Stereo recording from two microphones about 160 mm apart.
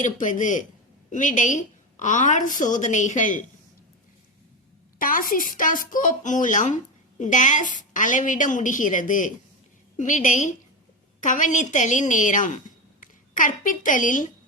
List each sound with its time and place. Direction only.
0.0 s a woman's voice: 55° left (ahead or behind)
4.9 s a woman's voice: 60° left (ahead or behind)